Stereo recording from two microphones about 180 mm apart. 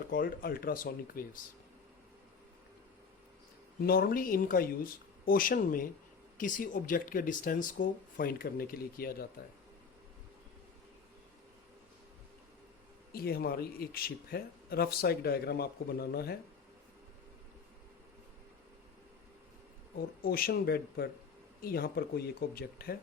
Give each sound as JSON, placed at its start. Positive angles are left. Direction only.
{"t": 0.1, "sound": "speech", "side_deg": 50}
{"t": 3.8, "sound": "speech", "side_deg": 55}
{"t": 13.1, "sound": "speech", "side_deg": 55}
{"t": 20.0, "sound": "speech", "side_deg": 55}